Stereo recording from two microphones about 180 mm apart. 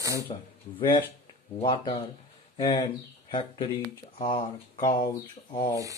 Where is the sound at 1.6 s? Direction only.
25° left (ahead or behind).